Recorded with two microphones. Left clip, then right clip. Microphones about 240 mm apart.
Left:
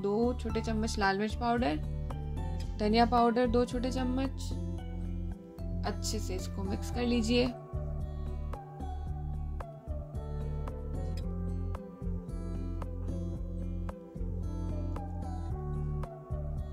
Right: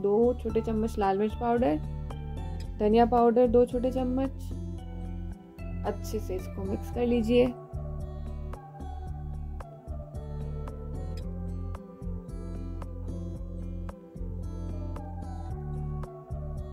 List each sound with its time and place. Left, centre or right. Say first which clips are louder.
0.3 s speech: right 6 dB; left
2.8 s speech: right 4 dB; left
4.2 s speech: right 4 dB; centre
5.8 s speech: right 4 dB; left